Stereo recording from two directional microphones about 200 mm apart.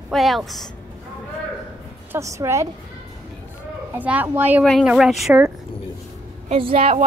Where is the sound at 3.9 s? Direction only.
10° right (ahead or behind).